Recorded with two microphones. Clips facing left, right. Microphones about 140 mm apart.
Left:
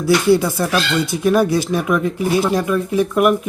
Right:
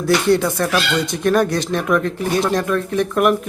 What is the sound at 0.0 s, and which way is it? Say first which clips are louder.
Speech: left 2 dB; 5° left (ahead or behind).